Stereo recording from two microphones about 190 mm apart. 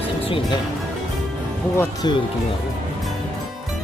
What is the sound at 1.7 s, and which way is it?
Speech, 15° left (ahead or behind).